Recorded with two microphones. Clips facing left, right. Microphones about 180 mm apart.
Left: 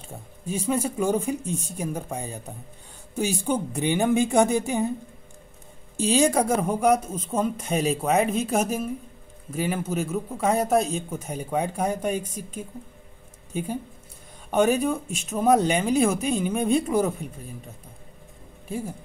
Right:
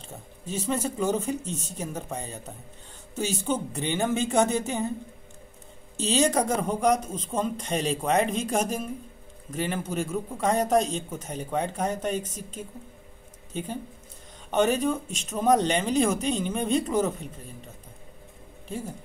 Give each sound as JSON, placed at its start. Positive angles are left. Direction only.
{"t": 0.1, "sound": "a man's voice", "side_deg": 10}
{"t": 5.9, "sound": "a man's voice", "side_deg": 10}
{"t": 18.7, "sound": "a man's voice", "side_deg": 10}